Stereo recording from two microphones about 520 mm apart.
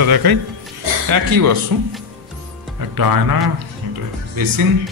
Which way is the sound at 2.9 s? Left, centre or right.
Right.